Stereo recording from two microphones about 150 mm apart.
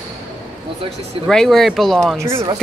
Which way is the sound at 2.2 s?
20° right (ahead or behind).